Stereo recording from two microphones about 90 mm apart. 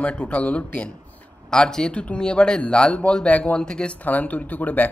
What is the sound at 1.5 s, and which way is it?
Speech, 5° left (ahead or behind).